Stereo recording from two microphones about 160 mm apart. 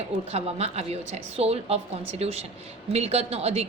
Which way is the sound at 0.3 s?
40° right (ahead or behind).